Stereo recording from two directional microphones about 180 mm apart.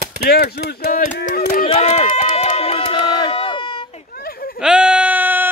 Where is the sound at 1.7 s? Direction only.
40° left (ahead or behind).